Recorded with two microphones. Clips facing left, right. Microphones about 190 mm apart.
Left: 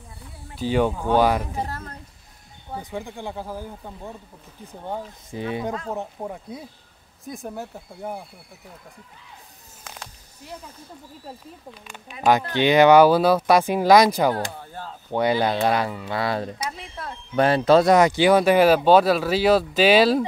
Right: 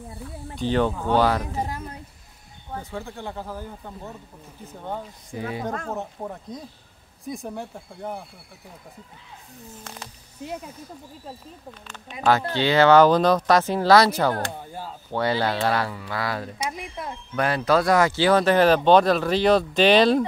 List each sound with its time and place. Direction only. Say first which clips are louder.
0.6 s speech: left 1 dB; 10° left (ahead or behind)
1.6 s a sound: right 1 dB; 10° right (ahead or behind)
2.7 s speech: left 1 dB; 15° left (ahead or behind)
5.9 s speech: left 1 dB; 10° left (ahead or behind)
9.9 s a sound: left 1 dB; centre (ahead or behind)
10.4 s speech: right 6 dB; 20° right (ahead or behind)
11.9 s speech: left 2 dB; 15° left (ahead or behind)
14.5 s speech: right 1 dB; 15° right (ahead or behind)
15.0 s speech: left 3 dB; 15° left (ahead or behind)
16.7 s speech: right 2 dB; 15° right (ahead or behind)
17.4 s speech: left 5 dB; 25° left (ahead or behind); by 20.2 s 5° left (ahead or behind)